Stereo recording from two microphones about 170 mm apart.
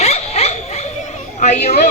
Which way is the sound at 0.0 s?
40° left (ahead or behind).